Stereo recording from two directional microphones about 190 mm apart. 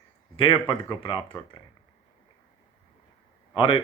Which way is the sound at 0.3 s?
25° left (ahead or behind).